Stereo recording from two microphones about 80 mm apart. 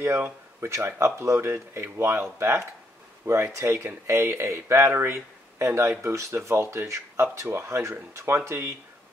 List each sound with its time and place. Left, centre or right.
0.0 s speech: right